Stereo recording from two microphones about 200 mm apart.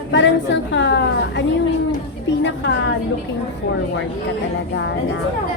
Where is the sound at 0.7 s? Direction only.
60° left (ahead or behind).